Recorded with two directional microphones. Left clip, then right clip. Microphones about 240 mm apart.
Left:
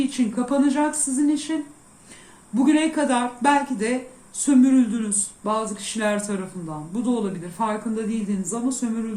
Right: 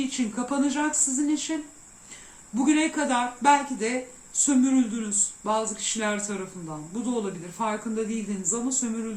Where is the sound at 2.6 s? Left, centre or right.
Centre.